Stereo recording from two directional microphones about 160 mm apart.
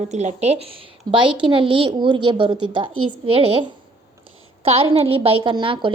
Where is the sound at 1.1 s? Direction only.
30° right (ahead or behind).